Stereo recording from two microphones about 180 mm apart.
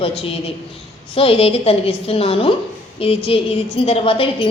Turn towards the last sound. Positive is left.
turn(degrees=30)  # may be behind; listen again after turning